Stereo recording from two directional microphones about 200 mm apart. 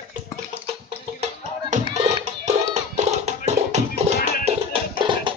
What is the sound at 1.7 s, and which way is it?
Music, 35° right (ahead or behind).